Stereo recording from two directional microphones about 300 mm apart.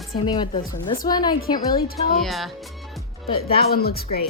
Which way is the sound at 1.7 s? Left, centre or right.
Left.